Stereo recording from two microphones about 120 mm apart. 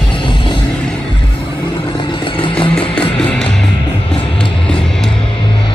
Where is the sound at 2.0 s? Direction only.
45° left (ahead or behind).